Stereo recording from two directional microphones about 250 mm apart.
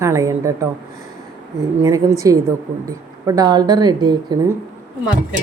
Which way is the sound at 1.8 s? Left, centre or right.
Centre.